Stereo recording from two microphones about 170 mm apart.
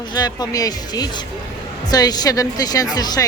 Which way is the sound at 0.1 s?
25° left (ahead or behind).